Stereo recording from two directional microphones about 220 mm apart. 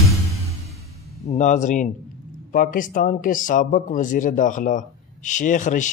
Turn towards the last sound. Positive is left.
turn(degrees=35)  # may be behind; listen again after turning